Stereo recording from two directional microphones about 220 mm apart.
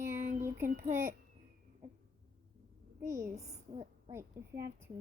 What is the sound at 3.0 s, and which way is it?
Child singing, 15° right (ahead or behind).